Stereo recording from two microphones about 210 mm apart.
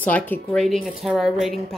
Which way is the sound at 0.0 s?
5° left (ahead or behind).